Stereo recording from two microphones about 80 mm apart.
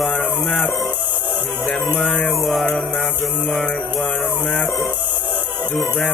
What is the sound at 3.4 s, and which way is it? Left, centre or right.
Music, centre.